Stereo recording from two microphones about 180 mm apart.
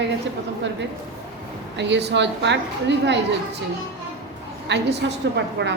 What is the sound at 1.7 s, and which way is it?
A woman's voice, 75° right (ahead or behind).